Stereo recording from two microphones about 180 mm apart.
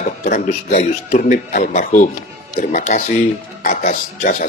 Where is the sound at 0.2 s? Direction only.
45° left (ahead or behind).